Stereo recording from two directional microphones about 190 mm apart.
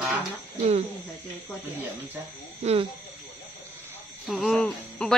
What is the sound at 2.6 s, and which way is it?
Speech, 35° right (ahead or behind).